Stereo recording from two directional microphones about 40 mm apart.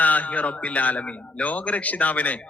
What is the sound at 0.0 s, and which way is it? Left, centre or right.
A man's voice, left.